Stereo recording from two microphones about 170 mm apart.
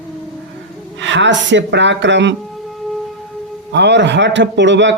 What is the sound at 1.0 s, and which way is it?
Speech, 90° right.